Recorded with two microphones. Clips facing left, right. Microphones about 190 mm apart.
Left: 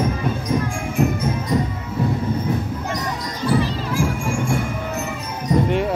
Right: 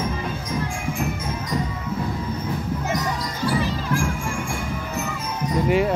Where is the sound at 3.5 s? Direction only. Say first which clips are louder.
Left 2 dB; centre (ahead or behind).